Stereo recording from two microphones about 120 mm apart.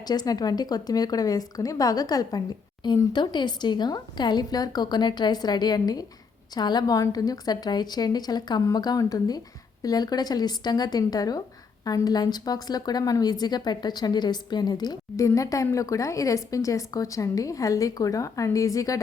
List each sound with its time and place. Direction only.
0.0 s a woman's voice: 35° left (ahead or behind)